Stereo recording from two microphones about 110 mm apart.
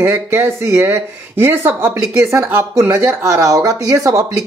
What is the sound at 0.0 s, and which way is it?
Speech, 20° right (ahead or behind).